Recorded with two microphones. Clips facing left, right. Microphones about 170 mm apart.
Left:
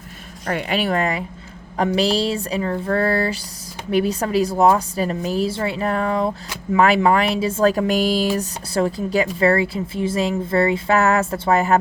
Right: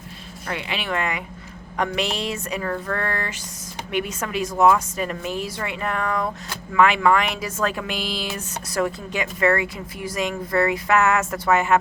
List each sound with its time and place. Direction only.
0.4 s speech: 45° left (ahead or behind)